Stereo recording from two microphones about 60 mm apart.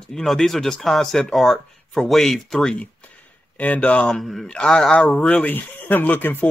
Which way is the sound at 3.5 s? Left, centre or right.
Left.